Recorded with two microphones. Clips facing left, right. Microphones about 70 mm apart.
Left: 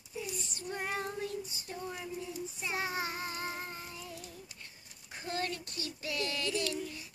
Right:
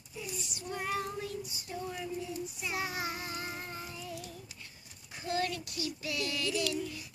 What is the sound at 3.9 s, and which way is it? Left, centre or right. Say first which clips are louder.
Child singing: right 3 dB; left.